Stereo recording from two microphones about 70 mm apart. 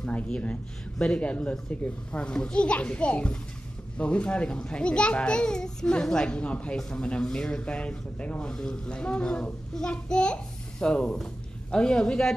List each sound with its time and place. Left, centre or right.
0.0 s a child's voice: centre